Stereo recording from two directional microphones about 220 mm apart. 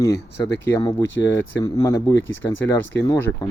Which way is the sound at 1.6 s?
15° left (ahead or behind).